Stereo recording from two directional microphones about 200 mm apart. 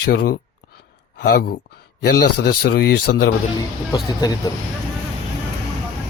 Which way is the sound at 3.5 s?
20° left (ahead or behind).